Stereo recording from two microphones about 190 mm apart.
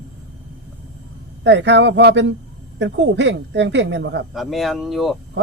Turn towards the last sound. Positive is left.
turn(degrees=0)  # may be behind; listen again after turning